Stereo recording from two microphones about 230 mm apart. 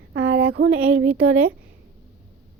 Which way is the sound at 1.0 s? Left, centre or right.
Right.